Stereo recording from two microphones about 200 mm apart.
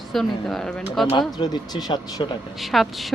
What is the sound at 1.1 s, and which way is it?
Speech, 20° left (ahead or behind).